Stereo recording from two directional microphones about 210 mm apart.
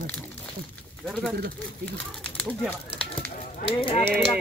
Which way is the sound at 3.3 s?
30° left (ahead or behind).